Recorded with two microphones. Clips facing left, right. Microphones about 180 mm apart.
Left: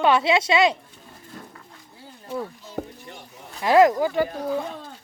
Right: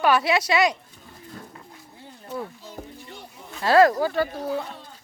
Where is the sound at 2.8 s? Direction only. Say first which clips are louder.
Left 8 dB; 70° left (ahead or behind).